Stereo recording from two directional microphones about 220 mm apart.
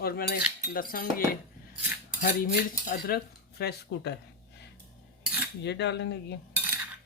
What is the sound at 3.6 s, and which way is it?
Speech, 45° left (ahead or behind).